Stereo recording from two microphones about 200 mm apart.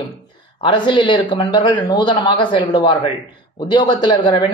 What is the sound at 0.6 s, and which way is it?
Speech, 25° left (ahead or behind).